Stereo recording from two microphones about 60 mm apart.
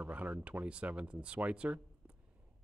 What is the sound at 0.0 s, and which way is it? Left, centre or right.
Speech, right.